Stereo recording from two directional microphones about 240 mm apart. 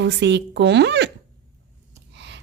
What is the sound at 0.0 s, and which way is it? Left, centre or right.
Speech, right.